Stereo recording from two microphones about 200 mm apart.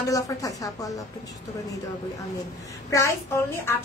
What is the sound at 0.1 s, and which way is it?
Speech, 15° left (ahead or behind).